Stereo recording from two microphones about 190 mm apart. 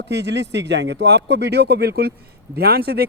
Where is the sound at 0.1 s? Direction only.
65° right (ahead or behind).